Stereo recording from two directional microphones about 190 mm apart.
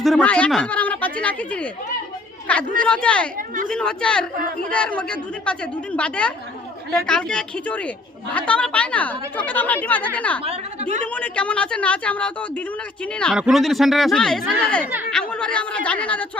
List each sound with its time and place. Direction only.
0.0 s speech: 5° left (ahead or behind)
3.3 s speech: 45° right (ahead or behind)
3.7 s a woman's voice: 5° left (ahead or behind)
10.4 s a woman's voice: 35° right (ahead or behind)
11.0 s a woman's voice: 5° left (ahead or behind)